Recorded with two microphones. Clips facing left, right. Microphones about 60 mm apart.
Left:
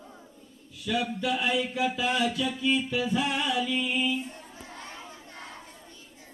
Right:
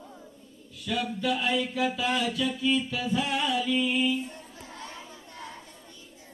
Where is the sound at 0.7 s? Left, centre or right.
Centre.